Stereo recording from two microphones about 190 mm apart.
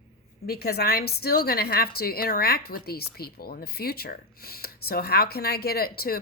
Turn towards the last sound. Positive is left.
turn(degrees=50)  # may be behind; listen again after turning